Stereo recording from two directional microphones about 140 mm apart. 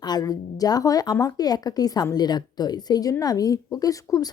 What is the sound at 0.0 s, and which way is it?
Speech, 30° left (ahead or behind).